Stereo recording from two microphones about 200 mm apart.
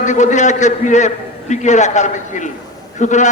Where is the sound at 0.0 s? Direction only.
35° left (ahead or behind).